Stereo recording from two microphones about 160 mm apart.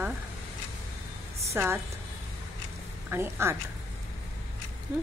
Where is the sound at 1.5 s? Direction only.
15° right (ahead or behind).